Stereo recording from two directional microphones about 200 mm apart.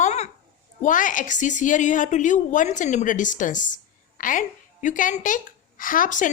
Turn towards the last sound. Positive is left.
turn(degrees=40)  # may be behind; listen again after turning